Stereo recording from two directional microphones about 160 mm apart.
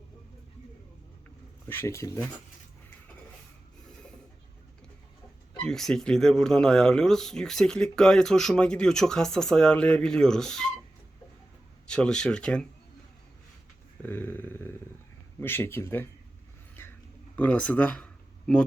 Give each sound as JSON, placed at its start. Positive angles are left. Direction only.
{"t": 1.6, "sound": "speech", "side_deg": 15}
{"t": 5.6, "sound": "speech", "side_deg": 5}
{"t": 11.9, "sound": "speech", "side_deg": 5}
{"t": 14.0, "sound": "a sound", "side_deg": 10}
{"t": 15.4, "sound": "speech", "side_deg": 15}
{"t": 17.3, "sound": "speech", "side_deg": 10}